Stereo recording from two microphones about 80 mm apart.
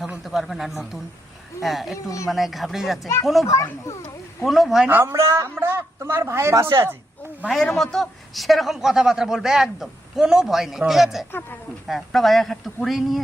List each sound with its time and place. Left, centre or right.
0.3 s a man's voice: centre
2.0 s a child's voice: left
2.3 s a man's voice: centre
3.4 s a child's voice: left
4.4 s a man's voice: centre
5.0 s speech: right
7.5 s a man's voice: centre